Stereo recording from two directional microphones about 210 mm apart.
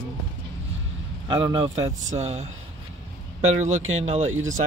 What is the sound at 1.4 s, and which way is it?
Speech, 25° right (ahead or behind).